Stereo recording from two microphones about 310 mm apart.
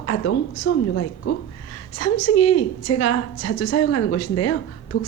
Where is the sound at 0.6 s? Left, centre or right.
Left.